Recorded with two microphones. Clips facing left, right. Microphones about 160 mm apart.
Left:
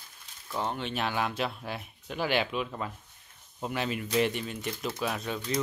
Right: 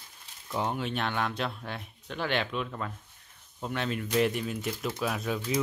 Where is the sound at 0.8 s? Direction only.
5° left (ahead or behind).